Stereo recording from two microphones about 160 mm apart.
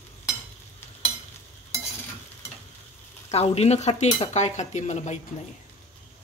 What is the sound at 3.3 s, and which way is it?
Speech, 40° left (ahead or behind).